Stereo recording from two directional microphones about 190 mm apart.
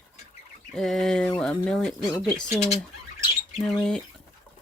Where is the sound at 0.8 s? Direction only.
Centre (ahead or behind).